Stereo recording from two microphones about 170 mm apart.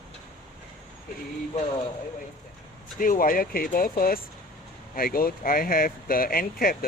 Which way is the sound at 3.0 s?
55° left (ahead or behind).